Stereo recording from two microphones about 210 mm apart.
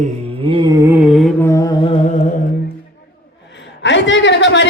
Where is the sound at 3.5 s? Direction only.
60° left (ahead or behind).